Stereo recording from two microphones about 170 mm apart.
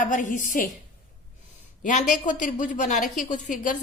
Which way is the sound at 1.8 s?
50° left (ahead or behind).